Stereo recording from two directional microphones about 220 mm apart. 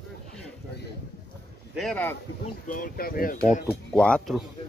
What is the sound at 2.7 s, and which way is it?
Speech, 40° left (ahead or behind).